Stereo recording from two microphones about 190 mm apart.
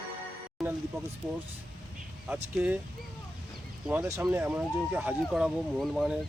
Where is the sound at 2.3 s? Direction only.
5° right (ahead or behind).